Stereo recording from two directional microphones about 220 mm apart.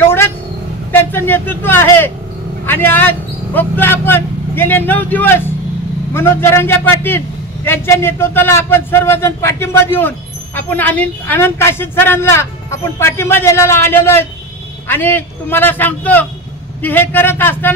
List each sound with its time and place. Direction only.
0.0 s vehicle: 10° left (ahead or behind)
1.1 s a man's voice: 10° left (ahead or behind)